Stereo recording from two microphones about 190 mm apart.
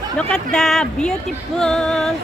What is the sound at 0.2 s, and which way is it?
Speech, 5° left (ahead or behind).